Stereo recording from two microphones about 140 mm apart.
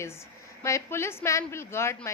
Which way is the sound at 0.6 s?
20° left (ahead or behind).